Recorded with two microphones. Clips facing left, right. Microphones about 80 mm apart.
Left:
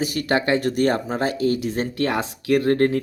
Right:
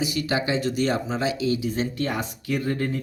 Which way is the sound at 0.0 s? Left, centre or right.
Left.